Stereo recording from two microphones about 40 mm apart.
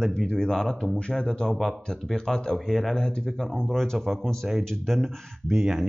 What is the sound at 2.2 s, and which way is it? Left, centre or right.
Speech, centre.